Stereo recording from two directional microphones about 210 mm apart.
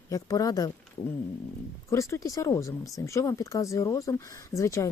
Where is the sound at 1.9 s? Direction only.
15° left (ahead or behind).